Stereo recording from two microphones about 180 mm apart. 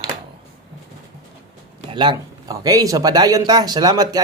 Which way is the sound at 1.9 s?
25° right (ahead or behind).